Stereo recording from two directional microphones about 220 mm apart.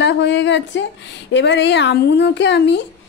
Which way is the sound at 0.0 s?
50° left (ahead or behind).